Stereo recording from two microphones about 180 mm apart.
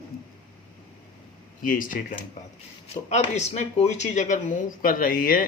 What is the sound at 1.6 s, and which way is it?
Speech, 50° left (ahead or behind).